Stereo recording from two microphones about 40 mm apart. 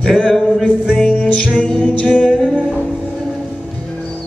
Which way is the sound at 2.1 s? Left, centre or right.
Left.